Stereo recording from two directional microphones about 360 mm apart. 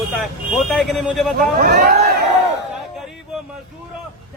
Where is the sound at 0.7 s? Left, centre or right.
Centre.